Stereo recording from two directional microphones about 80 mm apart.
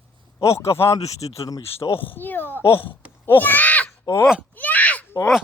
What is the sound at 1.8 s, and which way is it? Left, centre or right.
Speech, left.